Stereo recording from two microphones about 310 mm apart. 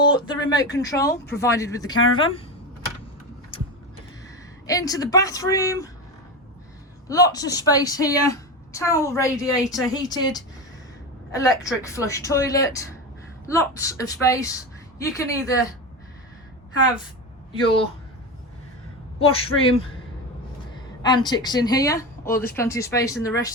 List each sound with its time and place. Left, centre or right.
0.0 s a sound: centre
0.5 s a woman's voice: centre
4.6 s a woman's voice: centre
7.1 s a woman's voice: centre
19.2 s a woman's voice: centre